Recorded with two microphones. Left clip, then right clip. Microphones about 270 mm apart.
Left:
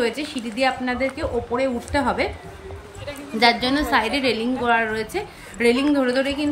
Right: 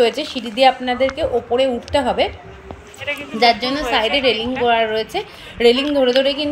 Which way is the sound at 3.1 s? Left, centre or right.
Centre.